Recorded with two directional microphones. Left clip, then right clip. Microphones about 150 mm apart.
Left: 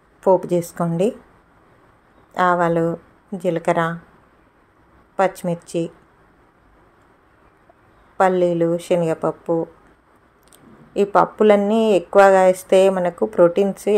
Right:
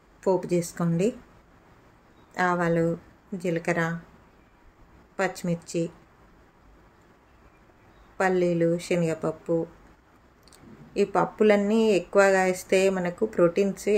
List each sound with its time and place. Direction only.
0.2 s speech: 20° left (ahead or behind)
2.3 s speech: 25° left (ahead or behind)
5.1 s speech: 20° left (ahead or behind)
8.2 s speech: 25° left (ahead or behind)
10.9 s speech: 20° left (ahead or behind)